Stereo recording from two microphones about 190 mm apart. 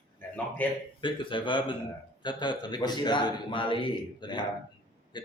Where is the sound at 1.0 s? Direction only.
25° left (ahead or behind).